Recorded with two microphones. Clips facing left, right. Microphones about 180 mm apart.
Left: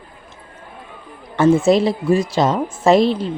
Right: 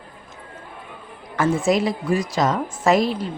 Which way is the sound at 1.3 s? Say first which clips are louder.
Left 6 dB; 25° left (ahead or behind).